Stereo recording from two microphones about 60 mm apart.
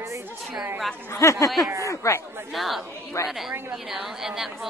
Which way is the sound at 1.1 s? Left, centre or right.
Left.